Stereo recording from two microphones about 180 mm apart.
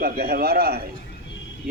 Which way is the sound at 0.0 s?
55° right (ahead or behind).